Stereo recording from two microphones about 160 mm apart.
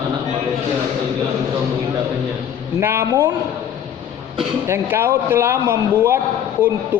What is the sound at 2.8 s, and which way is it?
Speech, 15° right (ahead or behind).